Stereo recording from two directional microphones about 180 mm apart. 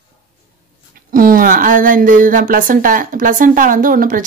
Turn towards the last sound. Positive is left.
turn(degrees=-50)  # may be behind; listen again after turning